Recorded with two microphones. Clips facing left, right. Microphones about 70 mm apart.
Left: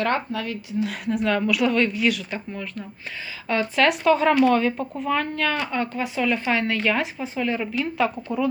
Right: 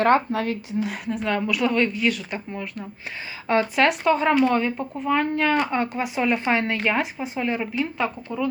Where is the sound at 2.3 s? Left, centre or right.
Centre.